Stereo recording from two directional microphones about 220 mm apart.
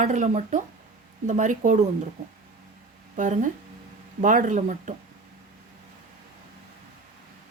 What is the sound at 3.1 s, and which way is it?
Speech, 35° right (ahead or behind).